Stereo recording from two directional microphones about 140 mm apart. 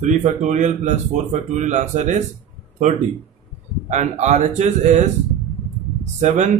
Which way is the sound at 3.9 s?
55° right (ahead or behind).